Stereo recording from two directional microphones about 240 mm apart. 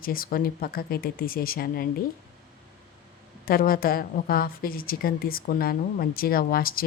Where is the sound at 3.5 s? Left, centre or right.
Left.